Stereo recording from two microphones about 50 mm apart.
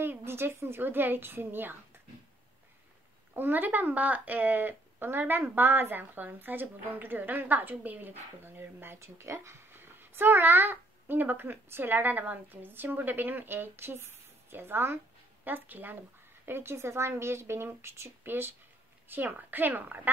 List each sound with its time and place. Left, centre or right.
0.0 s a woman's voice: right
3.3 s a woman's voice: right
9.0 s a child's voice: right
15.4 s a woman's voice: right
16.4 s a woman's voice: right
18.2 s a woman's voice: right